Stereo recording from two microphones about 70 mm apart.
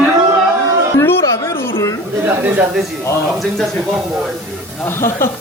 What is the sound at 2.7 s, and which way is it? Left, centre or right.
Speech, centre.